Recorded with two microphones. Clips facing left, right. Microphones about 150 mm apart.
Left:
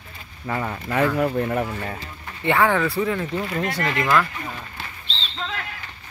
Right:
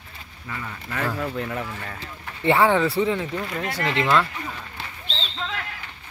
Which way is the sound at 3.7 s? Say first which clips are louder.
Left 1 dB; 10° right (ahead or behind).